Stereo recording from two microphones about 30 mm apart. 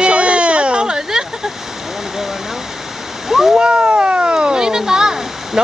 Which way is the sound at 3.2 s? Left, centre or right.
Centre.